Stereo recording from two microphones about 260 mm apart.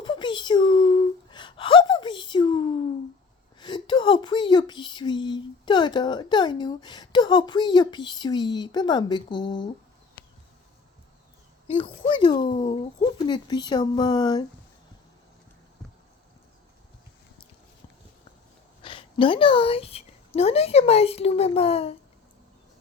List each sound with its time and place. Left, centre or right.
0.0 s whimper: centre
3.6 s speech: centre
11.7 s speech: centre
18.8 s a woman's voice: centre